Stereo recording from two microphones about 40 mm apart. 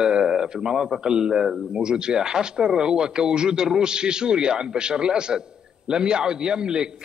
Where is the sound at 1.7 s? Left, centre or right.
Right.